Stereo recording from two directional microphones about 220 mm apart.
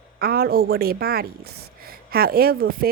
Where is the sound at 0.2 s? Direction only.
45° right (ahead or behind).